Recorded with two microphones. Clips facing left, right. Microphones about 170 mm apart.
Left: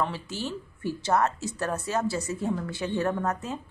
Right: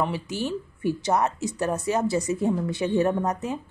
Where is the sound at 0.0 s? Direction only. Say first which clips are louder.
Right 4 dB; 15° right (ahead or behind).